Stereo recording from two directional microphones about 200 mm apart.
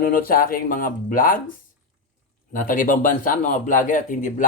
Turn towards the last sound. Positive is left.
turn(degrees=40)  # may be behind; listen again after turning